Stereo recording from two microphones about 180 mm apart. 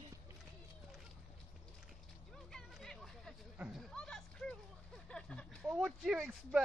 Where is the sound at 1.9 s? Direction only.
Centre (ahead or behind).